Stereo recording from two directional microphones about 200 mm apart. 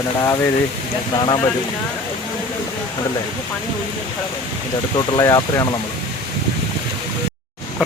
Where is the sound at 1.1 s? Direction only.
25° left (ahead or behind).